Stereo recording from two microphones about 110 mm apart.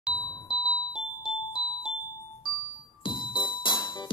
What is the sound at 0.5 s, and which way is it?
Music, 40° left (ahead or behind).